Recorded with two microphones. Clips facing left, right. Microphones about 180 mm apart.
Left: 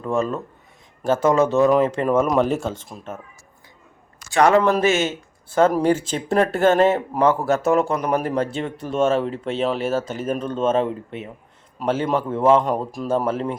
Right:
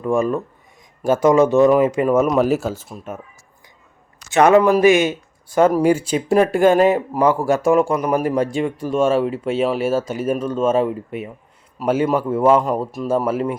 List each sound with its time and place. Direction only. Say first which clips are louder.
0.0 s speech: right 4 dB; 15° right (ahead or behind)
4.3 s speech: right 3 dB; 20° right (ahead or behind)